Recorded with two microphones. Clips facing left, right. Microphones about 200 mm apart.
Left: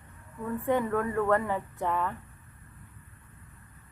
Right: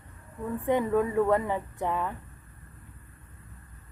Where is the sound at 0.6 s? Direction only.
15° right (ahead or behind).